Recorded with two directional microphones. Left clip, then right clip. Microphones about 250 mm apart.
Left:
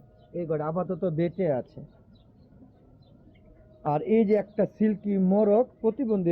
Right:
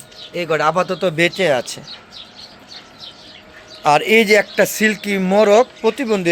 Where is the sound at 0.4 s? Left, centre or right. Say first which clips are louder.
Right 13 dB; right.